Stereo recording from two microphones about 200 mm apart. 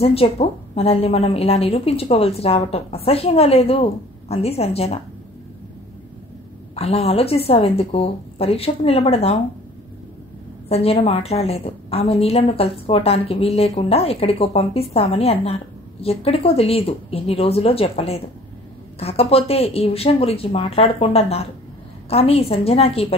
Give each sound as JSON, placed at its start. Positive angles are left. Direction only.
{"t": 0.0, "sound": "a woman's voice", "side_deg": 30}
{"t": 6.7, "sound": "a woman's voice", "side_deg": 30}
{"t": 10.7, "sound": "a woman's voice", "side_deg": 30}